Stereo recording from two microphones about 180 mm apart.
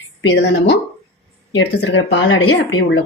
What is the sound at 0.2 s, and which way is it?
Speech, 85° left.